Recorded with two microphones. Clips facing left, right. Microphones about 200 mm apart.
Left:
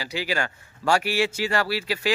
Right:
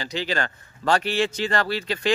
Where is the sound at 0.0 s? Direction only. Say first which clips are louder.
Right 1 dB; 10° left (ahead or behind).